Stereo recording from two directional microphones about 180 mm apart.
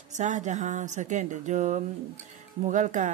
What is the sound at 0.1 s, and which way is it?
Speech, 40° right (ahead or behind).